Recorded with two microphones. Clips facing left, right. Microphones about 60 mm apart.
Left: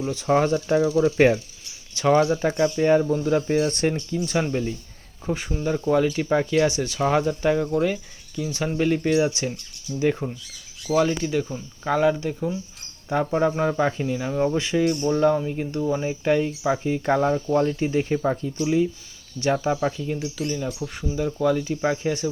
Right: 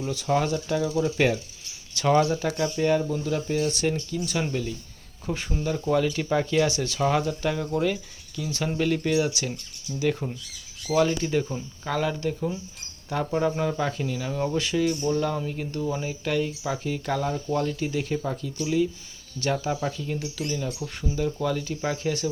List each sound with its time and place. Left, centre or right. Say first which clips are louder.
0.1 s speech: left 4 dB; left
2.0 s speech: left 3 dB; centre
6.7 s speech: left 2 dB; left
10.8 s speech: left 2 dB; centre
11.9 s speech: left 6 dB; centre